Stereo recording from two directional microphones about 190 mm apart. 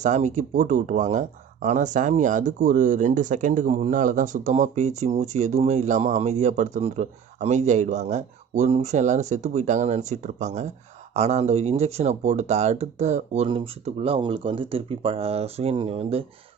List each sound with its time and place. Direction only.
0.0 s speech: 40° right (ahead or behind)